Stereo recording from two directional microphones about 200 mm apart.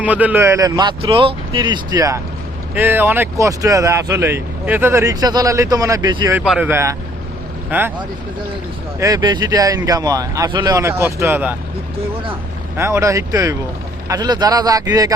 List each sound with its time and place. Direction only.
0.0 s speech: 5° right (ahead or behind)
6.3 s speech: 5° right (ahead or behind)
9.0 s speech: 15° right (ahead or behind)
12.7 s speech: 15° right (ahead or behind)